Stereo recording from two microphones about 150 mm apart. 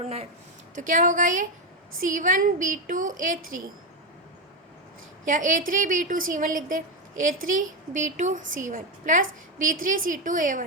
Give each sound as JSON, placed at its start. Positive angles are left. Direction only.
{"t": 0.0, "sound": "a woman's voice", "side_deg": -45}
{"t": 0.8, "sound": "a woman's voice", "side_deg": -60}
{"t": 5.2, "sound": "a woman's voice", "side_deg": -60}